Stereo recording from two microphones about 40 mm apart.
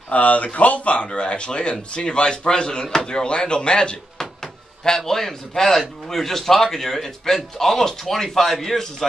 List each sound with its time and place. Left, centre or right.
0.1 s speech: left
4.2 s speech: centre